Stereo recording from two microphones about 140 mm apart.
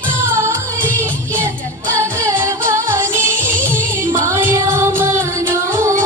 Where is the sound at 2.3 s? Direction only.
15° right (ahead or behind).